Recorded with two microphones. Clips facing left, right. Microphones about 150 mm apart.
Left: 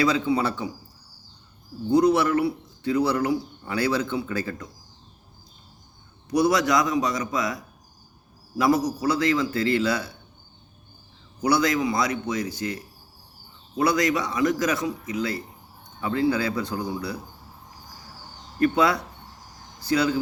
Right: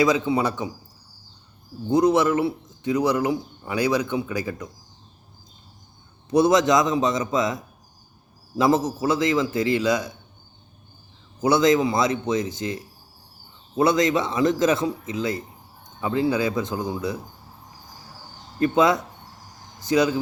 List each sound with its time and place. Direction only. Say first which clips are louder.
0.0 s a man's voice: right 2 dB; 20° right (ahead or behind)
1.9 s speech: right 1 dB; 20° right (ahead or behind)
6.3 s speech: right 3 dB; 25° right (ahead or behind)
11.3 s speech: right 4 dB; 20° right (ahead or behind)
18.6 s speech: right 2 dB; 20° right (ahead or behind)